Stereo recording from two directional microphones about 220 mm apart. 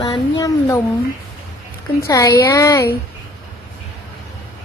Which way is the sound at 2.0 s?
15° left (ahead or behind).